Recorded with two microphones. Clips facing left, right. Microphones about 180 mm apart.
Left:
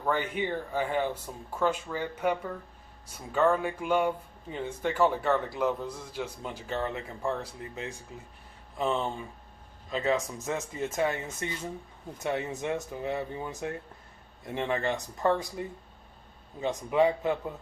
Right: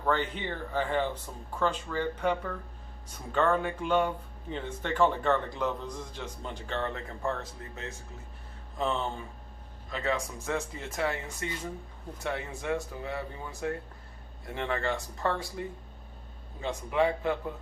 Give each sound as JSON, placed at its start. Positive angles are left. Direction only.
{"t": 0.0, "sound": "a man's voice", "side_deg": 10}
{"t": 8.8, "sound": "a man's voice", "side_deg": 15}